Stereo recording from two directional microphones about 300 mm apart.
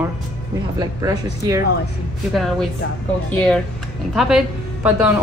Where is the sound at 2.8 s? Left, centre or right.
Left.